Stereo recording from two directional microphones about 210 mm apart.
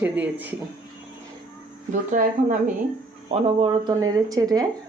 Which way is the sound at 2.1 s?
40° right (ahead or behind).